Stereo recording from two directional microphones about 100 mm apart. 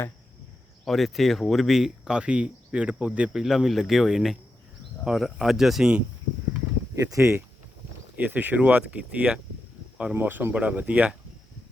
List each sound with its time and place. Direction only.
0.9 s speech: centre (ahead or behind)
6.9 s speech: 35° right (ahead or behind)
8.1 s speech: 15° right (ahead or behind)